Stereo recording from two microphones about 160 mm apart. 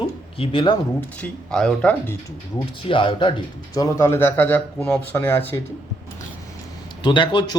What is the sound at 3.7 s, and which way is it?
A man's voice, 20° left (ahead or behind).